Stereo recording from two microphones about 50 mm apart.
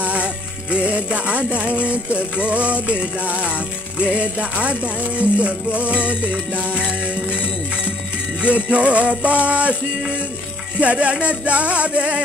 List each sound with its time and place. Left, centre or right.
0.0 s music: right
8.4 s music: right
10.8 s music: right